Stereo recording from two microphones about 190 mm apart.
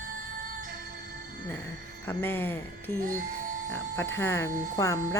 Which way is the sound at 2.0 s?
10° left (ahead or behind).